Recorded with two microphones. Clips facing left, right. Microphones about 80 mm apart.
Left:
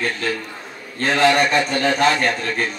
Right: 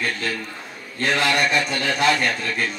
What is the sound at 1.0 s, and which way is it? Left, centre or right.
A man's voice, left.